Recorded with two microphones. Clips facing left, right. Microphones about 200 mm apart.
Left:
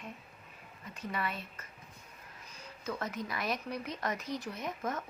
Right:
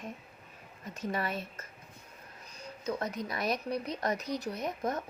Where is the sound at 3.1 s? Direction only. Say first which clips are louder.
Right 3 dB; 35° right (ahead or behind).